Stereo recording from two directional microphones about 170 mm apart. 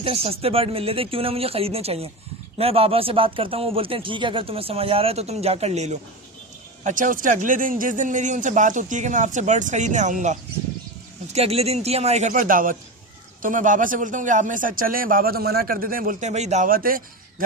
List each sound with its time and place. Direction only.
0.0 s a man's voice: 35° right (ahead or behind); by 17.0 s 55° right (ahead or behind)